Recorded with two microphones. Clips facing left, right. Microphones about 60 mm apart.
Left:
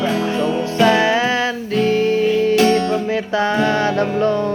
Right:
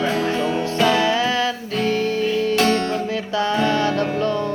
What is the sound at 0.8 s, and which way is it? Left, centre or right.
Music, left.